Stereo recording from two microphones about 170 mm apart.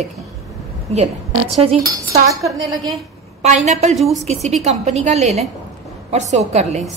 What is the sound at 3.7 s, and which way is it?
Speech, 40° right (ahead or behind).